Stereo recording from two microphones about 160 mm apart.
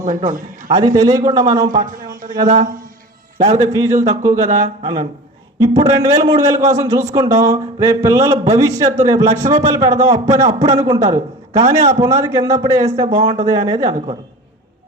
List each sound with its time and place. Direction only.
0.0 s a man's voice: 55° right (ahead or behind)
0.7 s a man's voice: 25° right (ahead or behind)
3.3 s a man's voice: 50° right (ahead or behind)
3.7 s a man's voice: 20° right (ahead or behind)